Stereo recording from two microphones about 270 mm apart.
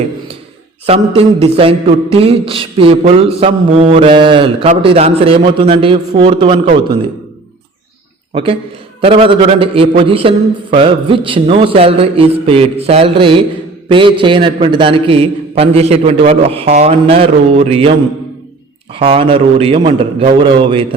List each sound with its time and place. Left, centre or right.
0.9 s mantra: right
8.3 s speech: centre
9.0 s mantra: right
18.9 s mantra: centre